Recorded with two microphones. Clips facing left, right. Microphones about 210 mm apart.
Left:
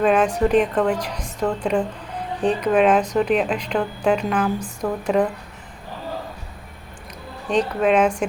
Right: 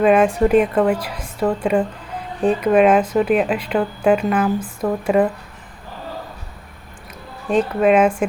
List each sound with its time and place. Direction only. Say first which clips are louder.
0.0 s speech: right 3 dB; 5° right (ahead or behind)
7.4 s speech: right 3 dB; 5° right (ahead or behind)